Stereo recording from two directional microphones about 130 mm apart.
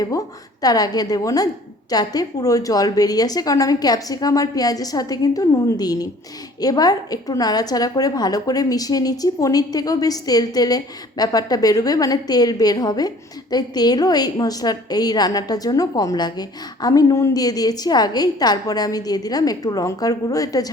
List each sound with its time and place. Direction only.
0.0 s a woman's voice: 25° left (ahead or behind)